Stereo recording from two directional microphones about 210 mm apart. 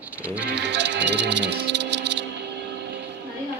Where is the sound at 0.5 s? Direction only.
55° right (ahead or behind).